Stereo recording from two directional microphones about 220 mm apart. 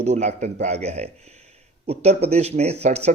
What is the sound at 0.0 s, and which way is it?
Speech, 30° right (ahead or behind).